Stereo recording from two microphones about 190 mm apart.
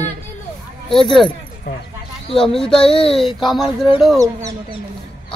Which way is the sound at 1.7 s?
60° left (ahead or behind).